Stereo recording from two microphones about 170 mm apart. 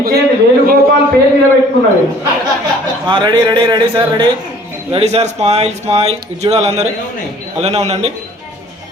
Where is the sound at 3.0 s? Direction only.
25° right (ahead or behind).